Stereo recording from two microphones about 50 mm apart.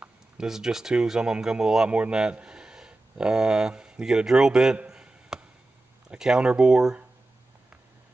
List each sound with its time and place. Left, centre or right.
0.0 s speech: centre
1.9 s speech: right
4.8 s a sound: centre
6.0 s speech: centre